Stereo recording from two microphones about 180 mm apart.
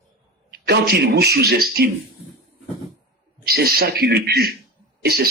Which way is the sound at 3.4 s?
60° right (ahead or behind).